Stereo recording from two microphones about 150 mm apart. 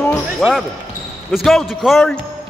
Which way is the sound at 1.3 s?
Centre (ahead or behind).